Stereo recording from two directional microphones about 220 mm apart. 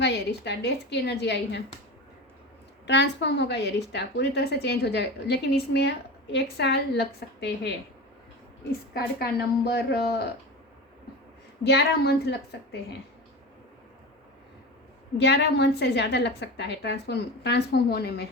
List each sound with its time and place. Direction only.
0.0 s a woman's voice: 50° left (ahead or behind)
2.8 s a woman's voice: 55° left (ahead or behind)
8.9 s a woman's voice: 45° left (ahead or behind)
11.6 s a woman's voice: 45° left (ahead or behind)
15.2 s a woman's voice: 50° left (ahead or behind)